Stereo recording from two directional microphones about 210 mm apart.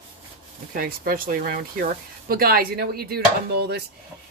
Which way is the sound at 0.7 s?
45° right (ahead or behind).